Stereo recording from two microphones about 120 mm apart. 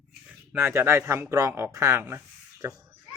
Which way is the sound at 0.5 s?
15° right (ahead or behind).